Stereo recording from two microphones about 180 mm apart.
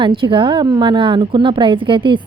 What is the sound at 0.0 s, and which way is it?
A woman's voice, 25° right (ahead or behind).